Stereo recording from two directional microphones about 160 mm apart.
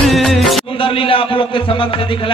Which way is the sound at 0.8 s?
35° left (ahead or behind).